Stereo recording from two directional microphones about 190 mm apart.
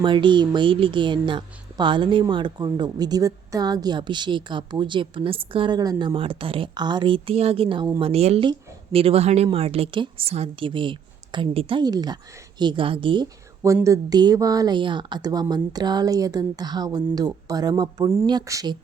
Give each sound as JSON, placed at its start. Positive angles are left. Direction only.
{"t": 0.0, "sound": "a woman's voice", "side_deg": -25}